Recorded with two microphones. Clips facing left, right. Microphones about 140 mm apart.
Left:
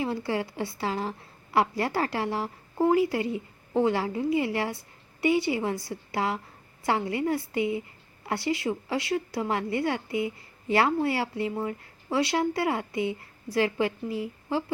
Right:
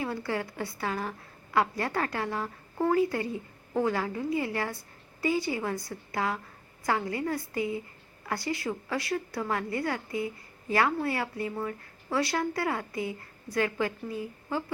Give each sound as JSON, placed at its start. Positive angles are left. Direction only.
{"t": 0.0, "sound": "a woman's voice", "side_deg": 25}